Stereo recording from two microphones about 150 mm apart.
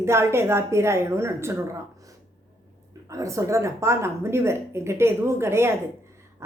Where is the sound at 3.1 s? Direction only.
20° right (ahead or behind).